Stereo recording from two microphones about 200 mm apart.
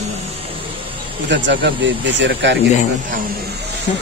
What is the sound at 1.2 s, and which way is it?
Speech, 65° right (ahead or behind).